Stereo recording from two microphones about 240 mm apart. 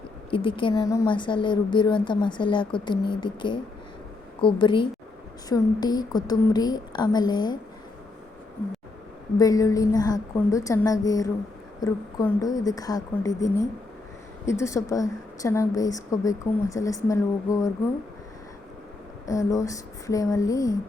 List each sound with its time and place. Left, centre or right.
0.3 s speech: left
9.4 s speech: centre
19.2 s speech: centre